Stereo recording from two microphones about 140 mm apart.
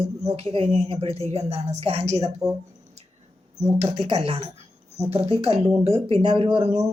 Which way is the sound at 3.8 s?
50° right (ahead or behind).